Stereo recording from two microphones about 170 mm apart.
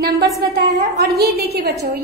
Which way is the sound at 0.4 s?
65° right (ahead or behind).